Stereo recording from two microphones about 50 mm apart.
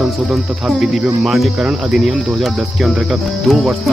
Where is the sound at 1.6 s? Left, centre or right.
Centre.